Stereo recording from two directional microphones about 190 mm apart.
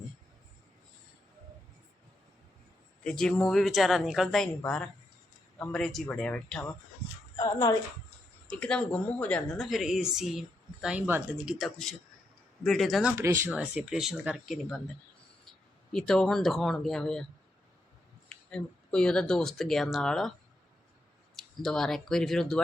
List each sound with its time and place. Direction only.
3.0 s speech: 5° left (ahead or behind)
7.3 s speech: 20° left (ahead or behind)
8.5 s speech: 5° left (ahead or behind)
13.1 s speech: 15° right (ahead or behind); by 14.8 s centre (ahead or behind)
15.9 s speech: centre (ahead or behind)
18.3 s speech: 5° left (ahead or behind)
21.3 s speech: centre (ahead or behind)